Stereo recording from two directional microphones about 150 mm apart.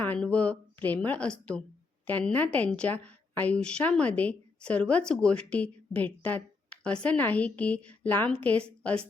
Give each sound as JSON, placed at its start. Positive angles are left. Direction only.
{"t": 0.0, "sound": "a woman's voice", "side_deg": 10}